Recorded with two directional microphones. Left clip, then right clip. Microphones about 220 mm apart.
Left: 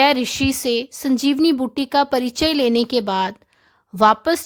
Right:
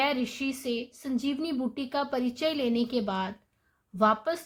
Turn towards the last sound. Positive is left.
turn(degrees=55)  # may be behind; listen again after turning